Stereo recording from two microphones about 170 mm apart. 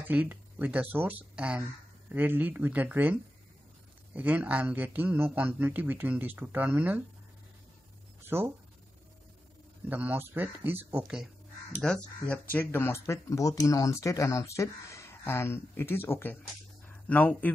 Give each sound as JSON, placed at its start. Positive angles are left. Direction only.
{"t": 0.0, "sound": "speech", "side_deg": -10}
{"t": 8.2, "sound": "speech", "side_deg": -15}
{"t": 9.8, "sound": "speech", "side_deg": -10}
{"t": 11.8, "sound": "speech", "side_deg": 5}
{"t": 16.8, "sound": "a sound", "side_deg": 10}